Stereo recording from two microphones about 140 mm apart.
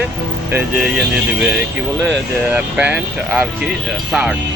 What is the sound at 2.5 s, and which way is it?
Speech, 10° right (ahead or behind).